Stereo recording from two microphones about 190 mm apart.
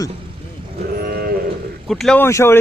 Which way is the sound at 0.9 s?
55° right (ahead or behind).